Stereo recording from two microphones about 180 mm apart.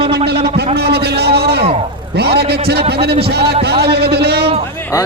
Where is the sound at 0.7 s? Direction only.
65° right (ahead or behind).